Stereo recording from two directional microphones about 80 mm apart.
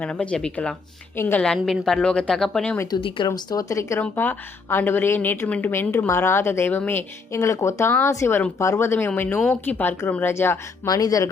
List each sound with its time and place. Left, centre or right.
0.0 s speech: centre
1.1 s a woman's voice: left
1.5 s a woman's voice: centre
1.8 s speech: centre
2.8 s speech: left
3.2 s speech: left
4.1 s a woman's voice: left
7.3 s a woman's voice: left
10.8 s speech: left